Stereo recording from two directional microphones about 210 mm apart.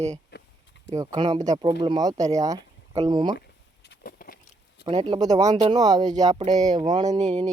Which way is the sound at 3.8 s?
50° left (ahead or behind).